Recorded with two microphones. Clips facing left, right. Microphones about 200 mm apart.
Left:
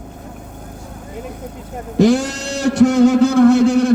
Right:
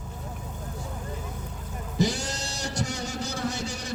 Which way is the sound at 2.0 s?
90° left.